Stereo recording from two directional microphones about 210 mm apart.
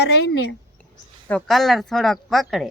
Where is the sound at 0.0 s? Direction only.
55° left (ahead or behind).